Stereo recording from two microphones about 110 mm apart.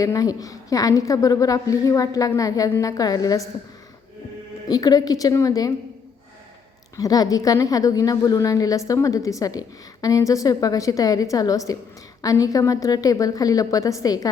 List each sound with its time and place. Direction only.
0.0 s a woman's voice: 30° left (ahead or behind)
4.7 s a woman's voice: 35° left (ahead or behind)
6.9 s a woman's voice: 35° left (ahead or behind)